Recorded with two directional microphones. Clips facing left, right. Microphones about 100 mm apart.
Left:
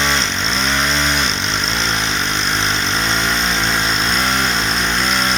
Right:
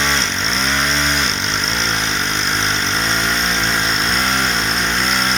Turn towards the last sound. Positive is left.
turn(degrees=5)  # may be behind; listen again after turning